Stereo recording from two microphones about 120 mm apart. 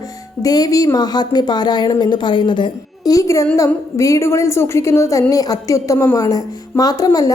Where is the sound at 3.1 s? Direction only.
25° left (ahead or behind).